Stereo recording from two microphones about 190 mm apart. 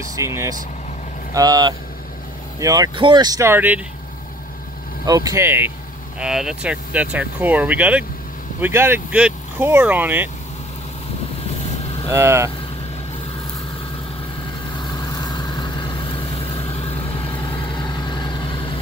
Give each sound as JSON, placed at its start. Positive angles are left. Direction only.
{"t": 0.1, "sound": "speech", "side_deg": -15}
{"t": 5.0, "sound": "speech", "side_deg": -20}
{"t": 12.1, "sound": "speech", "side_deg": -15}
{"t": 15.0, "sound": "vehicle", "side_deg": 20}